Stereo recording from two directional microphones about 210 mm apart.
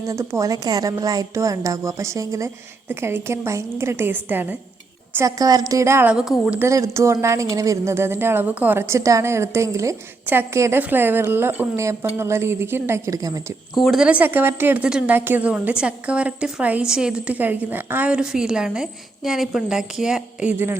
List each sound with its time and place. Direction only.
0.1 s speech: 15° right (ahead or behind)
13.7 s a woman's voice: centre (ahead or behind)